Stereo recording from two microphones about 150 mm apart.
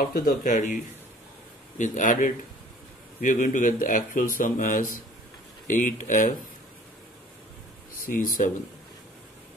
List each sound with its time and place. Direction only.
0.0 s speech: 70° left (ahead or behind)
1.8 s speech: 55° left (ahead or behind)
8.1 s speech: 60° left (ahead or behind)